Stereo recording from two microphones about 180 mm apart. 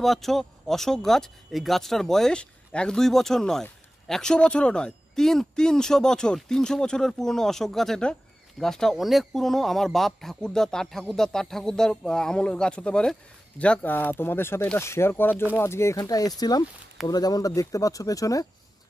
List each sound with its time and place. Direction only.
0.0 s speech: centre (ahead or behind); by 18.5 s 20° left (ahead or behind)